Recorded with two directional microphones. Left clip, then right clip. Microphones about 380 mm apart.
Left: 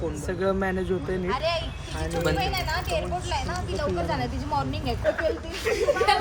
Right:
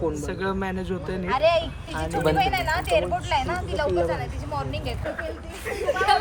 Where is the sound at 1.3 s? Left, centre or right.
Right.